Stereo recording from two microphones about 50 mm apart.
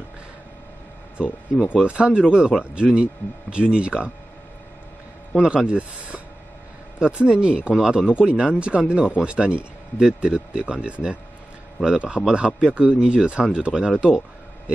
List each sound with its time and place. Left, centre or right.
1.1 s speech: right
5.3 s a man's voice: centre
5.7 s a sound: right
7.0 s a man's voice: centre